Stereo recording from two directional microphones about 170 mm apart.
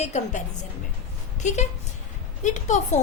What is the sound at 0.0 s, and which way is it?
A woman's voice, 40° left (ahead or behind).